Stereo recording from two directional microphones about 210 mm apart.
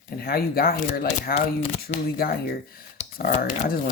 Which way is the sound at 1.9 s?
45° left (ahead or behind).